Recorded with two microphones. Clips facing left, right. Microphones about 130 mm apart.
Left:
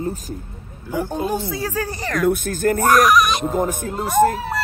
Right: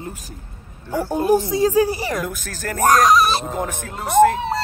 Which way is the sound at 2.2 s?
55° left (ahead or behind).